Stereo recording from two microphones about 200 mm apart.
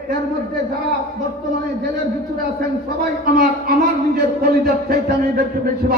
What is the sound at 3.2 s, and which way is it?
A man's voice, 50° right (ahead or behind).